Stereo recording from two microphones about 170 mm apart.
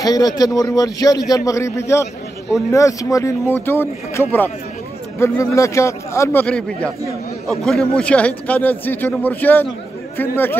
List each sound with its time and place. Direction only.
0.0 s a man's voice: 20° left (ahead or behind)
6.4 s a man's voice: 5° left (ahead or behind)